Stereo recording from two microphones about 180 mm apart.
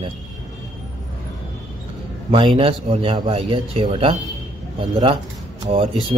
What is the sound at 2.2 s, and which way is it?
Speech, 30° right (ahead or behind).